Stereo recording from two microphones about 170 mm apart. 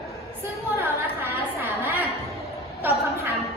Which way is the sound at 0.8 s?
15° right (ahead or behind).